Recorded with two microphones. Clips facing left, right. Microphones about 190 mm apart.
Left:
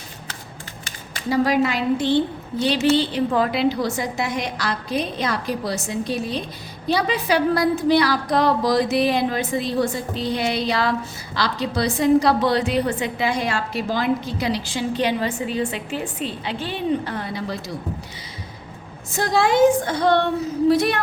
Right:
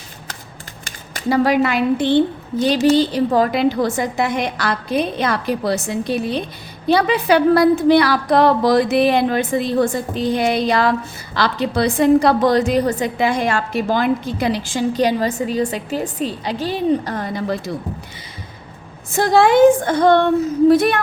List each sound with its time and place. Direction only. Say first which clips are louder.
1.3 s a woman's voice: right 3 dB; 60° right (ahead or behind)
2.6 s a woman's voice: right 4 dB; 40° right (ahead or behind)
19.1 s a woman's voice: right 6 dB; 60° right (ahead or behind)